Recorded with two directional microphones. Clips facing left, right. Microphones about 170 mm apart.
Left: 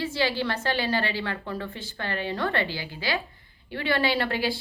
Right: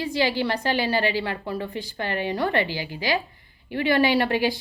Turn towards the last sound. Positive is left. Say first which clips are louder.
# right 4 dB
turn(degrees=-15)  # may be behind; listen again after turning